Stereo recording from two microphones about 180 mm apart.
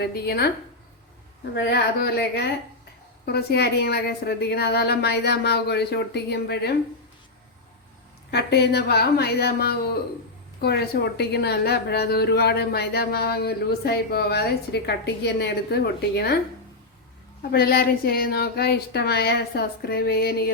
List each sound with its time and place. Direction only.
0.0 s a woman's voice: 60° left (ahead or behind)
1.5 s a woman's voice: 65° left (ahead or behind)
8.3 s a woman's voice: 65° left (ahead or behind)
17.5 s a woman's voice: 60° left (ahead or behind)